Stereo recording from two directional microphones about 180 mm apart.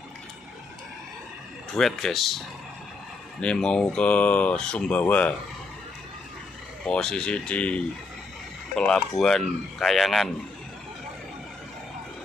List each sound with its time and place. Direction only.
1.7 s speech: centre (ahead or behind)
6.9 s speech: 5° left (ahead or behind)